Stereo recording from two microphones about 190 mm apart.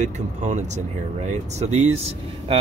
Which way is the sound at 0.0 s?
40° right (ahead or behind).